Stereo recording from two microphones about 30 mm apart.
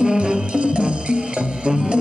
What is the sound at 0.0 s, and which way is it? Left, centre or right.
Music, right.